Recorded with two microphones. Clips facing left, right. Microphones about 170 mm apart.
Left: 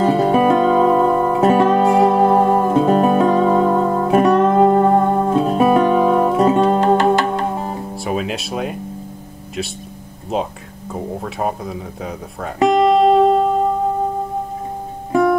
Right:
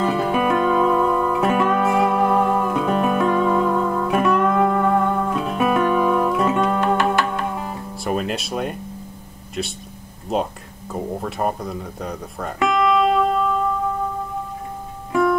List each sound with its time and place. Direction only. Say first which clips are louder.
0.0 s music: left 6 dB; 35° left (ahead or behind)
8.0 s music: even; centre (ahead or behind)
10.9 s speech: left 1 dB; centre (ahead or behind)
12.5 s music: left 5 dB; 35° left (ahead or behind)